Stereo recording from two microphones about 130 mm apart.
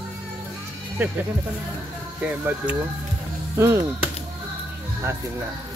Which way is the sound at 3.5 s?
20° right (ahead or behind).